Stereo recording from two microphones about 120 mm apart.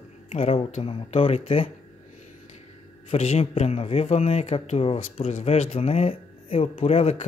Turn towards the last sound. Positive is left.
turn(degrees=55)  # may be behind; listen again after turning